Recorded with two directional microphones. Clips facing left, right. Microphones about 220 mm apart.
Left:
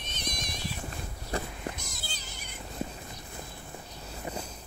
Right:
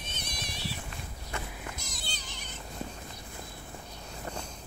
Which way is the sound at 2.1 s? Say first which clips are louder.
Even; 5° left (ahead or behind).